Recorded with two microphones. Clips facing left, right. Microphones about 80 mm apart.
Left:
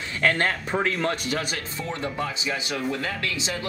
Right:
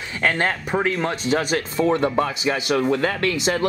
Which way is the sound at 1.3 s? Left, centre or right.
Right.